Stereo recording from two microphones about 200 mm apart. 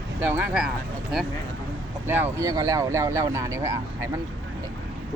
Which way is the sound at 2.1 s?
15° right (ahead or behind).